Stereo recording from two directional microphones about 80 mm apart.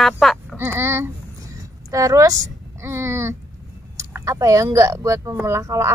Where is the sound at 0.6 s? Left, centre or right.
Right.